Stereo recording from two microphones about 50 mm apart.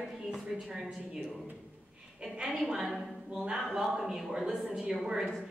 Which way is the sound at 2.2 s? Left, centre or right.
Centre.